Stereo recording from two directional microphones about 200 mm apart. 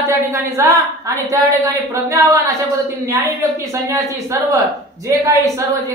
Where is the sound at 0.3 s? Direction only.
15° right (ahead or behind).